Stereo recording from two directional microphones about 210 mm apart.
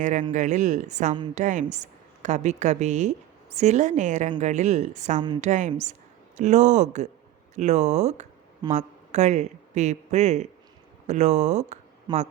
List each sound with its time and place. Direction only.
0.0 s a woman's voice: 35° right (ahead or behind)
12.1 s a man's voice: 20° right (ahead or behind)